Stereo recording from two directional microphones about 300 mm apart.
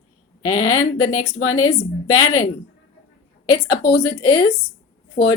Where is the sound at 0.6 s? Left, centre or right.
Left.